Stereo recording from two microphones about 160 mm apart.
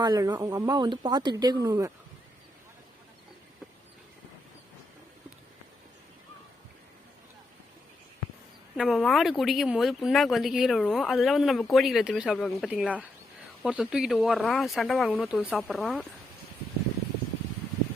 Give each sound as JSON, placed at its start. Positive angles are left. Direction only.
{"t": 0.0, "sound": "speech", "side_deg": -25}
{"t": 8.7, "sound": "speech", "side_deg": 0}